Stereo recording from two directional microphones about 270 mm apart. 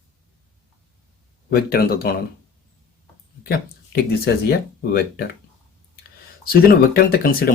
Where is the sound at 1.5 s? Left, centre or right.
Left.